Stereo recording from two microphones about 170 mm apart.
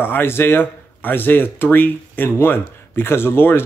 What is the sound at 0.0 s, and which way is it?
Speech, 10° left (ahead or behind).